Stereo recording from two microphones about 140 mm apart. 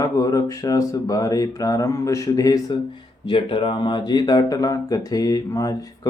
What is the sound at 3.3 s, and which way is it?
Speech, 40° left (ahead or behind).